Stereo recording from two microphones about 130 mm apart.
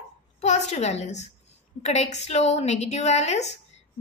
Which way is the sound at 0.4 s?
60° left (ahead or behind).